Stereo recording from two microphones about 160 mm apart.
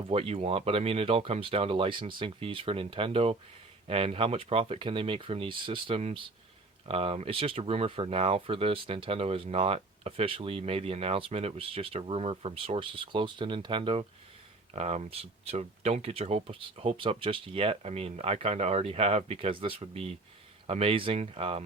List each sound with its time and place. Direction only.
0.1 s speech: 40° right (ahead or behind)